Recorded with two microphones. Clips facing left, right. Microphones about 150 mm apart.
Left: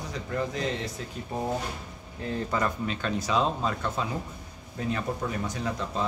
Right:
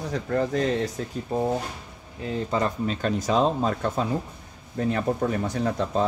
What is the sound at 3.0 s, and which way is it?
Speech, 45° right (ahead or behind).